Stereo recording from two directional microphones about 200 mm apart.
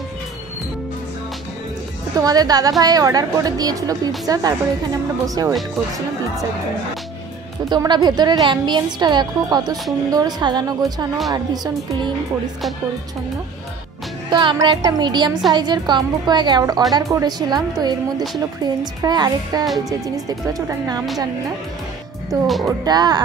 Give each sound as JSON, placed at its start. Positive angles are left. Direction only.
{"t": 2.1, "sound": "a woman's voice", "side_deg": -20}
{"t": 7.7, "sound": "a woman's voice", "side_deg": -20}
{"t": 14.3, "sound": "a woman's voice", "side_deg": -20}
{"t": 19.6, "sound": "speech", "side_deg": 0}
{"t": 19.9, "sound": "speech", "side_deg": -20}
{"t": 22.7, "sound": "a woman's voice", "side_deg": -20}